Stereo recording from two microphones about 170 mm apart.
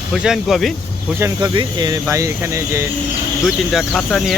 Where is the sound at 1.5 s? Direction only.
25° right (ahead or behind).